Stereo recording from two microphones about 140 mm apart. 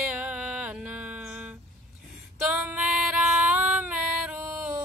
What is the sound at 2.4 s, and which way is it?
Female singing, 10° right (ahead or behind).